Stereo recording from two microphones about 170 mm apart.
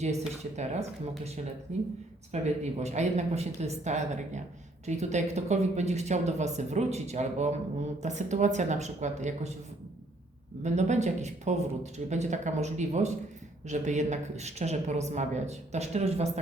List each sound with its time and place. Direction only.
0.0 s speech: 40° right (ahead or behind)
10.6 s speech: 45° right (ahead or behind)